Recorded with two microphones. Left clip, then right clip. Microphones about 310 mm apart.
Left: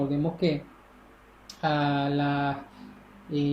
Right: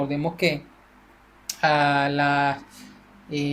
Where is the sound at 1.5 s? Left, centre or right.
Right.